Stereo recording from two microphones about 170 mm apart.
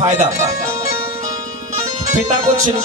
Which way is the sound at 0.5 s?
20° right (ahead or behind).